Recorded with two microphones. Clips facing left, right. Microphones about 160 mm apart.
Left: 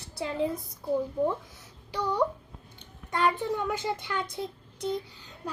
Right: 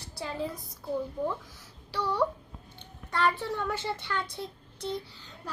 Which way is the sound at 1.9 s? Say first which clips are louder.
Left 1 dB; 15° left (ahead or behind).